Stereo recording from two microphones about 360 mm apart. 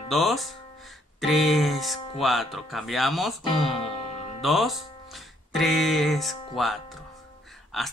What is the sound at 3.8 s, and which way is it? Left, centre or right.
Music, centre.